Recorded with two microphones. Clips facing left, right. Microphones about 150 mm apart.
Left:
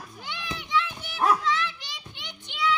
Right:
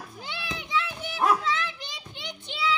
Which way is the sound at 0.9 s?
5° right (ahead or behind).